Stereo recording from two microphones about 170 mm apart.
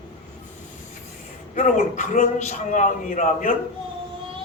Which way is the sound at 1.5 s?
45° left (ahead or behind).